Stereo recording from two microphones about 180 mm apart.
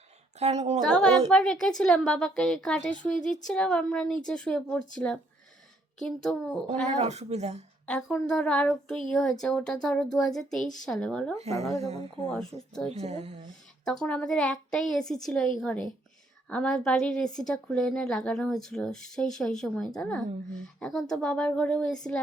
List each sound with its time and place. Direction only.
0.3 s a woman's voice: 35° right (ahead or behind)
1.3 s a woman's voice: 5° left (ahead or behind)
6.2 s a woman's voice: 5° left (ahead or behind)
7.0 s speech: 35° right (ahead or behind)
7.9 s a woman's voice: 5° left (ahead or behind)
11.6 s speech: 35° right (ahead or behind)
12.3 s a woman's voice: 5° left (ahead or behind)
12.9 s speech: 35° right (ahead or behind)
13.8 s a woman's voice: 5° left (ahead or behind)